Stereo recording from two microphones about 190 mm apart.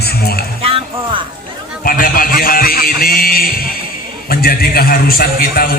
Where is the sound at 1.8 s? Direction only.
50° left (ahead or behind).